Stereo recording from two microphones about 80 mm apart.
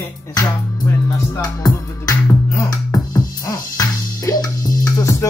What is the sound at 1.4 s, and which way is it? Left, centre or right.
Music, left.